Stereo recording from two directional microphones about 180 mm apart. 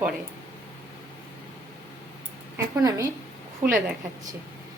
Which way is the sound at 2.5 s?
15° right (ahead or behind).